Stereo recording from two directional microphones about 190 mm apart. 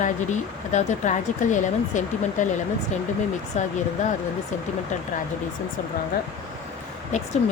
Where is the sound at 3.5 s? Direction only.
35° left (ahead or behind).